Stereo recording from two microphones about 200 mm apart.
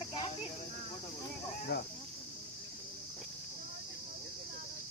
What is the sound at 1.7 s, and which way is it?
Snake, 55° left (ahead or behind).